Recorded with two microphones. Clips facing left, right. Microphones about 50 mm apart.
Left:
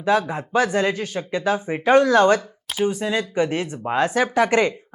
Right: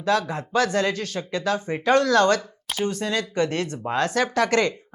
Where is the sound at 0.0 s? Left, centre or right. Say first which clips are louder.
Left 3 dB; centre.